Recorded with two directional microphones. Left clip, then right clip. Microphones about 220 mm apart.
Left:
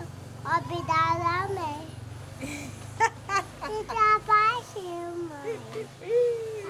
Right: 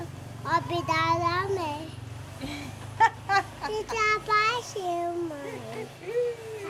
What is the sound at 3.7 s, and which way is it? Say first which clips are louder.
Child singing: left 4 dB; 20° right (ahead or behind).